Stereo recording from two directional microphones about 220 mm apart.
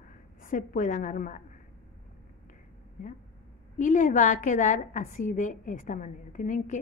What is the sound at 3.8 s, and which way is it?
A woman's voice, 35° left (ahead or behind).